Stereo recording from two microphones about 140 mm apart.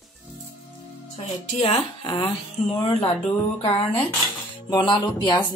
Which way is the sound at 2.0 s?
35° left (ahead or behind).